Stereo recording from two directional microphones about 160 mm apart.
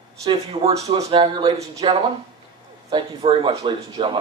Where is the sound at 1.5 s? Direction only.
40° right (ahead or behind).